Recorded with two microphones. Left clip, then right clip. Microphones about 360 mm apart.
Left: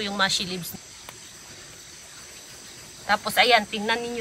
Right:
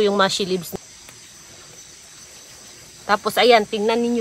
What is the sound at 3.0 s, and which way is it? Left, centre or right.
Speech, centre.